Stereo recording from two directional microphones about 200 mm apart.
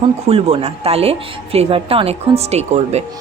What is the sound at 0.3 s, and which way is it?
Speech, 30° right (ahead or behind).